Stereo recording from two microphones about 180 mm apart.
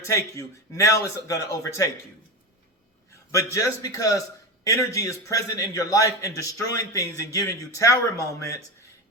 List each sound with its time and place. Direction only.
0.0 s a man's voice: 15° left (ahead or behind)
3.3 s a man's voice: 15° left (ahead or behind)